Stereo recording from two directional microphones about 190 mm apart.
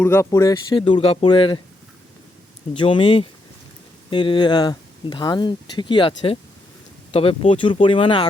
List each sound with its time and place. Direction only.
0.0 s speech: 15° left (ahead or behind)
2.7 s speech: 25° left (ahead or behind)